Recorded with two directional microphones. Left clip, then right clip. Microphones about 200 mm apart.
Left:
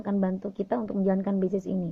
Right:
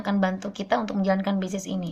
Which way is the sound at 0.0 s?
25° left (ahead or behind).